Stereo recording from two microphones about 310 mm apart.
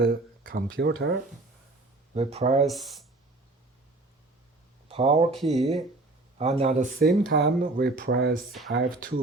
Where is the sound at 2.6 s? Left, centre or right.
Centre.